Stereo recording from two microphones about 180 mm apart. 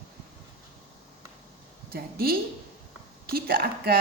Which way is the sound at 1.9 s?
60° right (ahead or behind).